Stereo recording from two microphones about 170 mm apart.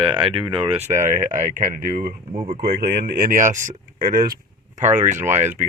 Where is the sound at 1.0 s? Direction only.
50° right (ahead or behind).